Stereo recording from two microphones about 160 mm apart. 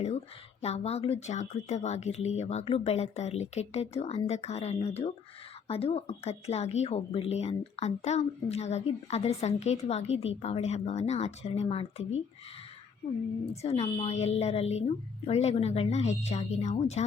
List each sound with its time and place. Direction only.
0.6 s speech: 40° left (ahead or behind)
13.4 s speech: 40° left (ahead or behind)